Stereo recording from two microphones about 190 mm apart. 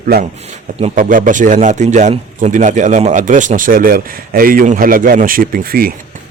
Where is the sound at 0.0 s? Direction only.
50° right (ahead or behind).